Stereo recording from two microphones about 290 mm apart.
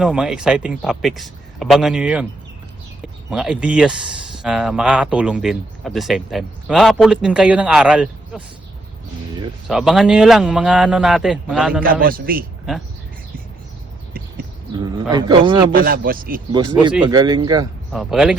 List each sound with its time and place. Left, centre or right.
0.0 s speech: centre
9.6 s speech: centre
11.8 s speech: right
15.1 s speech: centre
15.7 s speech: right
16.5 s speech: centre
17.9 s speech: centre